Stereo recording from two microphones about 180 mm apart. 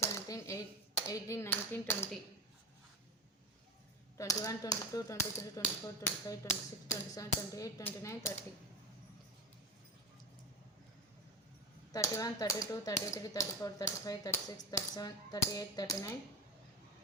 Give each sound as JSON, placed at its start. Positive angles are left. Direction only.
{"t": 0.0, "sound": "clapping", "side_deg": 15}
{"t": 4.2, "sound": "speech", "side_deg": 20}
{"t": 11.9, "sound": "speech", "side_deg": 15}